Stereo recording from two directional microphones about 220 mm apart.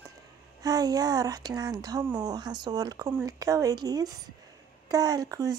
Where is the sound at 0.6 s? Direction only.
15° right (ahead or behind).